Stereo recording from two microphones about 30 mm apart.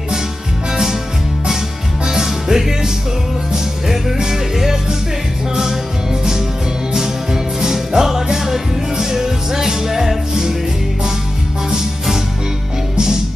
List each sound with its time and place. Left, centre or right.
2.0 s music: centre
7.6 s music: centre